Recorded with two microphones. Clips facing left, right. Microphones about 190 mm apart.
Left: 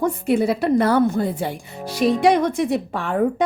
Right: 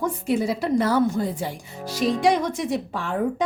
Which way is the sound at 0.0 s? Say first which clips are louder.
Left 4 dB; 60° left (ahead or behind).